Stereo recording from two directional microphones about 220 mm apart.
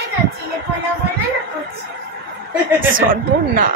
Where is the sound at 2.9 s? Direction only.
40° right (ahead or behind).